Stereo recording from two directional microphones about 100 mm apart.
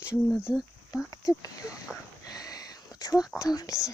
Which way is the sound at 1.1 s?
35° left (ahead or behind).